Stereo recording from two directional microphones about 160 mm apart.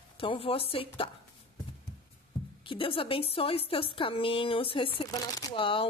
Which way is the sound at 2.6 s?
35° left (ahead or behind).